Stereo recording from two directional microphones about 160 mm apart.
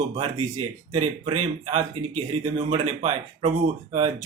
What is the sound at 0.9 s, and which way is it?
Speech, 45° right (ahead or behind).